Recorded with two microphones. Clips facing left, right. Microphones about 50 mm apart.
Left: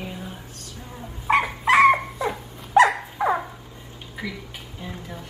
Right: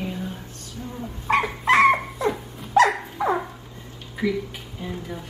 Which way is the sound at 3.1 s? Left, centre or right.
Centre.